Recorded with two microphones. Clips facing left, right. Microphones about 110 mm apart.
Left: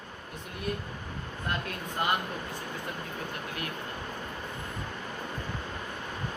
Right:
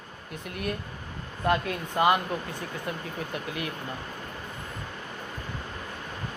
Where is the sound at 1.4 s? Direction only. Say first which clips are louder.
Right 9 dB; 90° right.